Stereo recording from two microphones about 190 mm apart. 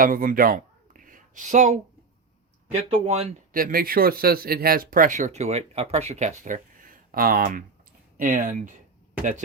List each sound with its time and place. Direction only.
0.0 s speech: 45° right (ahead or behind)
3.5 s speech: 50° right (ahead or behind)